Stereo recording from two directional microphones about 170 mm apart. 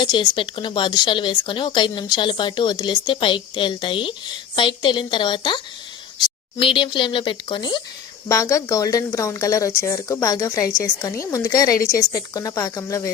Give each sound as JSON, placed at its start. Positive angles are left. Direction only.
{"t": 0.0, "sound": "speech", "side_deg": 25}
{"t": 8.3, "sound": "speech", "side_deg": 20}